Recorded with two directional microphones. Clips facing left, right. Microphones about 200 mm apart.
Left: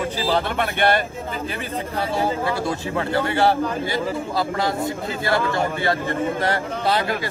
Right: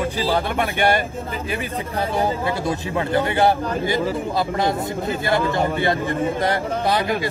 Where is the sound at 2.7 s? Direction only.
20° right (ahead or behind).